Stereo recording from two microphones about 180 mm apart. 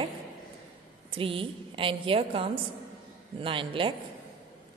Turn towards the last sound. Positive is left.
turn(degrees=-30)  # may be behind; listen again after turning